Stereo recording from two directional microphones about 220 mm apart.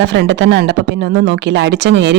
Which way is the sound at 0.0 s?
55° right (ahead or behind).